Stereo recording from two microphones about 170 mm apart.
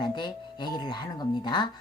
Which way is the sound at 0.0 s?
25° left (ahead or behind).